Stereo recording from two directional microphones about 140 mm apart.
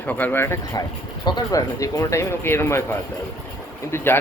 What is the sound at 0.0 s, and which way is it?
Speech, 10° left (ahead or behind).